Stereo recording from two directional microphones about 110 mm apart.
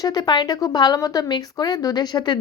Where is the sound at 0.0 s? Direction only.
40° left (ahead or behind).